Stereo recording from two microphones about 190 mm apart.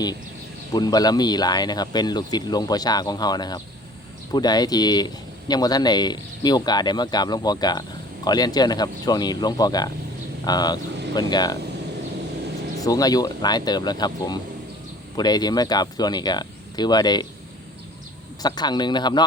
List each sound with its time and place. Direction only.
0.7 s speech: 20° left (ahead or behind)
12.8 s speech: 20° left (ahead or behind)
18.4 s speech: 20° left (ahead or behind)